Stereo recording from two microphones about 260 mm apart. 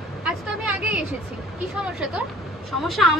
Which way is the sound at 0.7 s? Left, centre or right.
Centre.